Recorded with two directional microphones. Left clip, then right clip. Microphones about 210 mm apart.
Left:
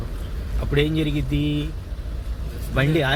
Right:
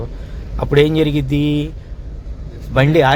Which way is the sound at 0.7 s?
50° right (ahead or behind).